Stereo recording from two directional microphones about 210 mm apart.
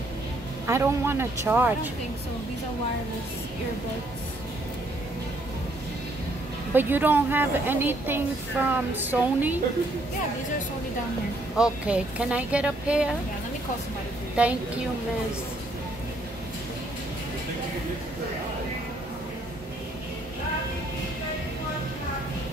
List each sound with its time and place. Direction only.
0.7 s a woman's voice: 10° right (ahead or behind)
6.7 s a woman's voice: 10° right (ahead or behind)
11.5 s a woman's voice: 5° right (ahead or behind)
14.3 s a woman's voice: 5° right (ahead or behind)